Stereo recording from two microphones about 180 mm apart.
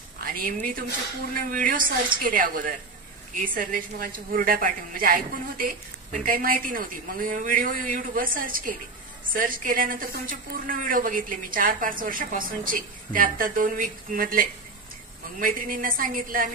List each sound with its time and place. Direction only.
0.2 s a woman's voice: 50° right (ahead or behind)